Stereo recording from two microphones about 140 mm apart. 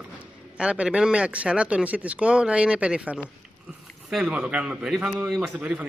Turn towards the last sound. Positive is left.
turn(degrees=-10)  # may be behind; listen again after turning